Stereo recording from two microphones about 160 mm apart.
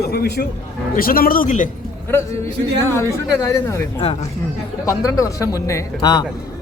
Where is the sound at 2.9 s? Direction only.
15° left (ahead or behind).